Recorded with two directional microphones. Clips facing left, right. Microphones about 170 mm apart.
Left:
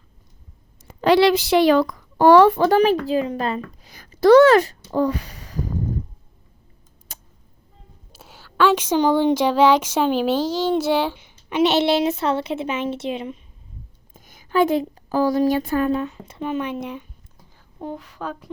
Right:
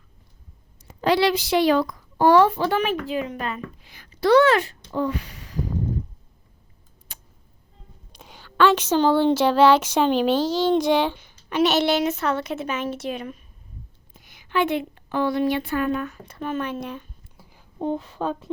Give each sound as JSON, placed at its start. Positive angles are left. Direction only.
{"t": 0.9, "sound": "speech", "side_deg": 65}
{"t": 2.6, "sound": "a woman's voice", "side_deg": 35}
{"t": 4.9, "sound": "a sound", "side_deg": 40}
{"t": 7.1, "sound": "a sound", "side_deg": 40}
{"t": 8.1, "sound": "speech", "side_deg": 5}
{"t": 11.2, "sound": "a woman's voice", "side_deg": 20}
{"t": 14.1, "sound": "a woman's voice", "side_deg": 45}
{"t": 16.0, "sound": "speech", "side_deg": 20}
{"t": 17.7, "sound": "speech", "side_deg": -25}